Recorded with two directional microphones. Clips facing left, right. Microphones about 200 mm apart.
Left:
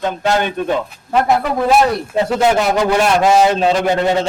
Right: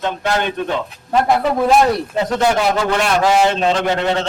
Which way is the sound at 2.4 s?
20° left (ahead or behind).